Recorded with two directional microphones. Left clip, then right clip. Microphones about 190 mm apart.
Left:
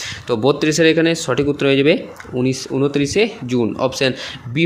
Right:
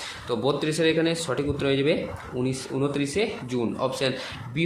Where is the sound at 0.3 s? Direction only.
35° left (ahead or behind).